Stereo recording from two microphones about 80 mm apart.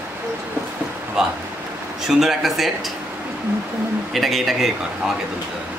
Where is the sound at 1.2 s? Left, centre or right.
Centre.